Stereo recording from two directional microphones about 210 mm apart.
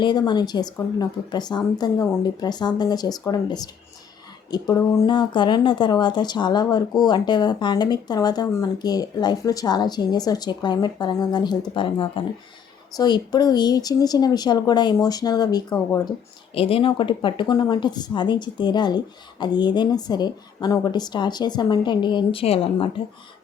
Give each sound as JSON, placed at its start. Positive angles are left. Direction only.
{"t": 0.0, "sound": "speech", "side_deg": 20}